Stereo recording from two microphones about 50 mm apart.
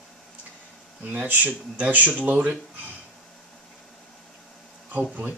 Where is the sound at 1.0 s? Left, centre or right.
Right.